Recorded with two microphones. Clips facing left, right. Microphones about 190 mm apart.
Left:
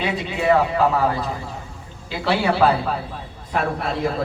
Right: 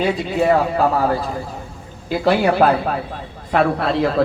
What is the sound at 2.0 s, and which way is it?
Speech, 50° right (ahead or behind).